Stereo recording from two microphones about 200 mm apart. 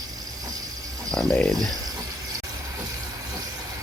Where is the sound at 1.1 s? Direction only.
Centre (ahead or behind).